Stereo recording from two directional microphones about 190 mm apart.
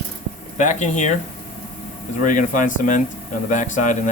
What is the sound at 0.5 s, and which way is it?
Speech, 40° left (ahead or behind).